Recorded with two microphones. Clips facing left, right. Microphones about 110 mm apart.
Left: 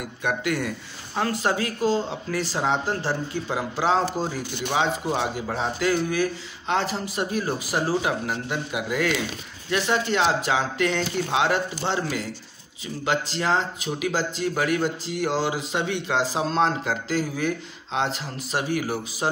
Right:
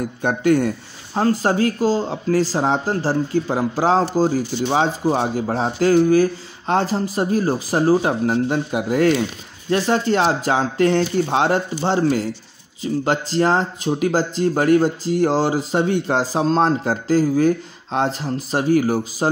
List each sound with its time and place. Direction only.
0.0 s speech: 35° right (ahead or behind)